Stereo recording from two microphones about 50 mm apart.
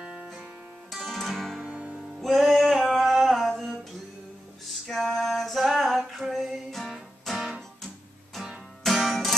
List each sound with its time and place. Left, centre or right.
0.0 s music: right
0.9 s guitar: centre
1.6 s music: centre
2.1 s music: centre
2.9 s a sound: centre
4.8 s female singing: centre
8.4 s music: centre